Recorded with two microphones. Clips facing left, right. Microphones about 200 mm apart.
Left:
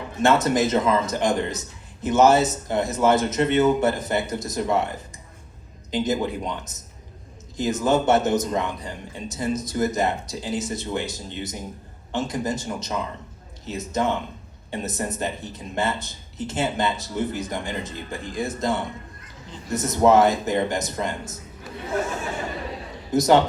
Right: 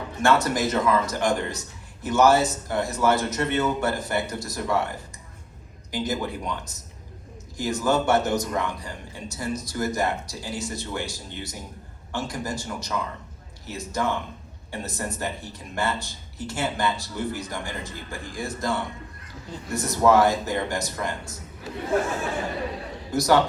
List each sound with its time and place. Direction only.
0.2 s speech: 20° left (ahead or behind)
23.1 s speech: 20° left (ahead or behind)